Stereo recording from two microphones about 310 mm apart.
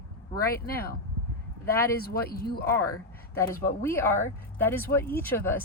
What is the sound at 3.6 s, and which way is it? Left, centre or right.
Speech, centre.